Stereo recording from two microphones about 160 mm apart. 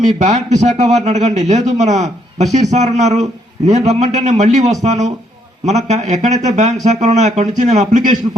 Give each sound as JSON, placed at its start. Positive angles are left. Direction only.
{"t": 0.2, "sound": "a man's voice", "side_deg": -50}